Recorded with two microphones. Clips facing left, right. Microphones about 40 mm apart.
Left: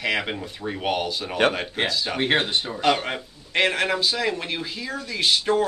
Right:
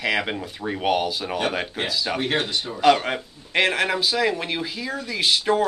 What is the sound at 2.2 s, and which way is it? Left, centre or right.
Speech, left.